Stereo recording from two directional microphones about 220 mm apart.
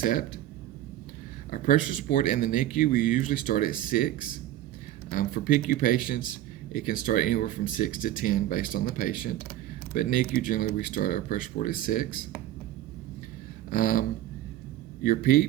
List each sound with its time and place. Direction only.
0.0 s speech: 40° left (ahead or behind)
1.5 s speech: 40° left (ahead or behind)
13.7 s a sound: 40° left (ahead or behind)
15.0 s speech: 40° left (ahead or behind)